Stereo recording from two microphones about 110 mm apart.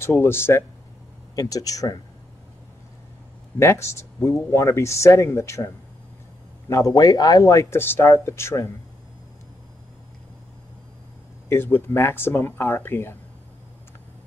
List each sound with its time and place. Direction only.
0.0 s speech: 20° left (ahead or behind)
1.3 s speech: 35° left (ahead or behind)
3.5 s speech: 25° left (ahead or behind)
6.7 s speech: 30° left (ahead or behind)
11.4 s speech: 20° left (ahead or behind)